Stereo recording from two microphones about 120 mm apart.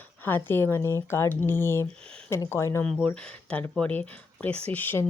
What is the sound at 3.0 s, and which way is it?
Speech, 10° left (ahead or behind).